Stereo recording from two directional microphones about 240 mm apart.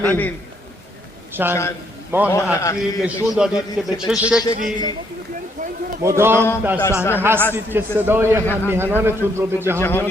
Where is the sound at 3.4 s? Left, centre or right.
Centre.